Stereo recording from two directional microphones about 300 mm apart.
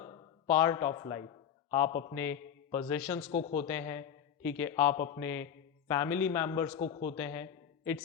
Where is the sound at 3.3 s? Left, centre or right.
Left.